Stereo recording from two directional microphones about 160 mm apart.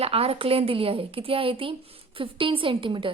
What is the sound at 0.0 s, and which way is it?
A woman's voice, 40° right (ahead or behind).